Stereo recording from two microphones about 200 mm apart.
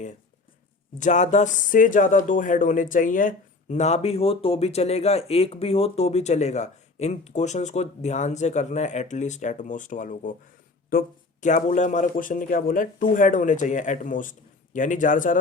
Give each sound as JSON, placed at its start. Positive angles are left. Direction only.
{"t": 0.9, "sound": "speech", "side_deg": 40}